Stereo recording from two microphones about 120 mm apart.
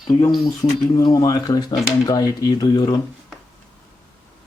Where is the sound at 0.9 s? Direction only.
30° left (ahead or behind).